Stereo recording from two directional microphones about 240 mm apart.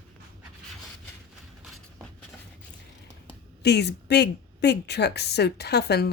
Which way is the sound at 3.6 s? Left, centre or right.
Left.